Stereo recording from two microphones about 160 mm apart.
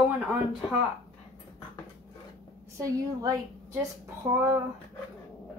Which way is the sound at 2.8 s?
20° right (ahead or behind).